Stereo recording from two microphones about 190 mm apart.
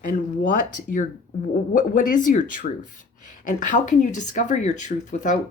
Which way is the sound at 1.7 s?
45° left (ahead or behind).